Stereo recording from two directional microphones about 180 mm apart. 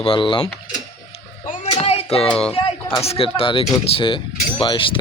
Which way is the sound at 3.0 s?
35° left (ahead or behind).